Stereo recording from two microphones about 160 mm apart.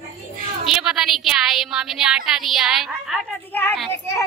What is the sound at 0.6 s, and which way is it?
A woman's voice, centre (ahead or behind).